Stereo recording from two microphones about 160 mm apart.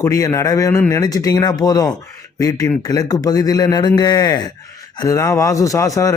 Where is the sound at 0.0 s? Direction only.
20° left (ahead or behind).